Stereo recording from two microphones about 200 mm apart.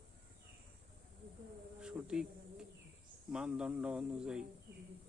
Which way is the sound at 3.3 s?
5° right (ahead or behind).